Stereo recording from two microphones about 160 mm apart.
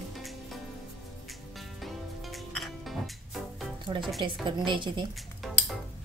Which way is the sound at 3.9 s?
25° right (ahead or behind).